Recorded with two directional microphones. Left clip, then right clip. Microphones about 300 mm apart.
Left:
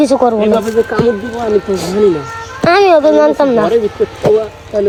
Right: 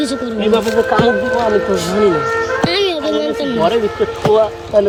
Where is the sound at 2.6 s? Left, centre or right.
Centre.